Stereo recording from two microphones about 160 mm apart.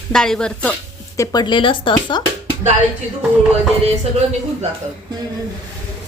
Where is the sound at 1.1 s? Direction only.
20° left (ahead or behind).